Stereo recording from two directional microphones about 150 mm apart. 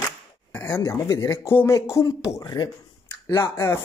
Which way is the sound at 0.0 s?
15° left (ahead or behind).